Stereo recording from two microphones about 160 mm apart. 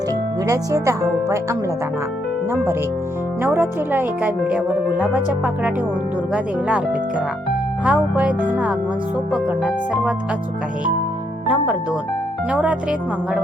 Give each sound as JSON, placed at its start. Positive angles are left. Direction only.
{"t": 0.4, "sound": "speech", "side_deg": -20}
{"t": 3.4, "sound": "speech", "side_deg": -15}
{"t": 7.9, "sound": "speech", "side_deg": -10}
{"t": 12.5, "sound": "speech", "side_deg": -10}